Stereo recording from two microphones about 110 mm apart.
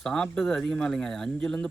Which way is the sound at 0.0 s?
5° left (ahead or behind).